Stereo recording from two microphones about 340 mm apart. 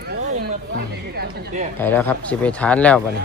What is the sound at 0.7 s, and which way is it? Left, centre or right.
Speech, right.